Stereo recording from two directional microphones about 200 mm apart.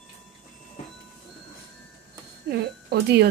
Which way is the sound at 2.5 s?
55° right (ahead or behind).